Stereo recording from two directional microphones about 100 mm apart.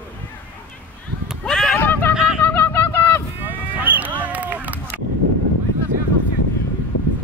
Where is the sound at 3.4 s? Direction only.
20° right (ahead or behind).